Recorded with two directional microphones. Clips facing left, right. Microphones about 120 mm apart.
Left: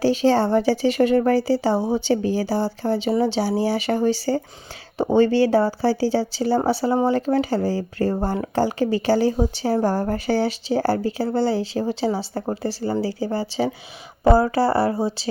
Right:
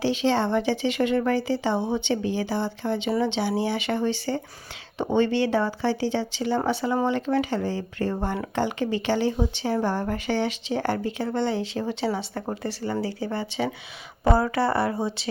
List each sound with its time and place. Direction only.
0.0 s a woman's voice: 40° left (ahead or behind)